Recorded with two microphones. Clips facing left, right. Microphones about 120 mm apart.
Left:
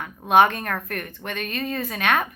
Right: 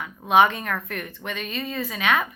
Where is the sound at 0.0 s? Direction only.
50° left (ahead or behind).